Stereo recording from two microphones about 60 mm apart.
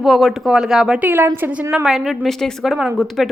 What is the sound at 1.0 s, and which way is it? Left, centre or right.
Speech, right.